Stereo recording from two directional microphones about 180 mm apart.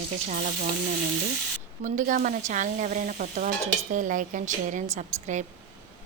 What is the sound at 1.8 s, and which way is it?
Stir, 45° right (ahead or behind).